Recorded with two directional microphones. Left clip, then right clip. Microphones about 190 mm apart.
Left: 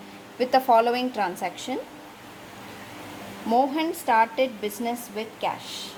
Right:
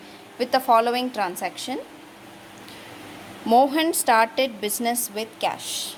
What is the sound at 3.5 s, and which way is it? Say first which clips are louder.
A woman's voice: right 5 dB; 35° right (ahead or behind).